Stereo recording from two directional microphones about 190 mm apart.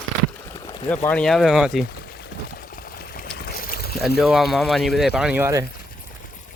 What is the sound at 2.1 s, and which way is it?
Pour, 50° left (ahead or behind).